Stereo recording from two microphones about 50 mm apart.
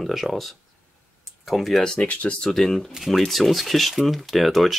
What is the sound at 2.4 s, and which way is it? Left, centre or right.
Speech, centre.